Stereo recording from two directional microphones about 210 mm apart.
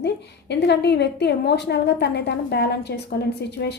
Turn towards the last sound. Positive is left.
turn(degrees=55)  # may be behind; listen again after turning